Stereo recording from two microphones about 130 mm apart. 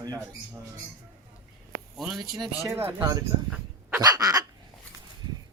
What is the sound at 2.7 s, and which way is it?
Speech, 20° right (ahead or behind).